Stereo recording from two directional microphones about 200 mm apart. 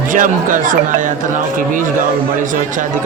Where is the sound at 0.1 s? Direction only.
40° right (ahead or behind).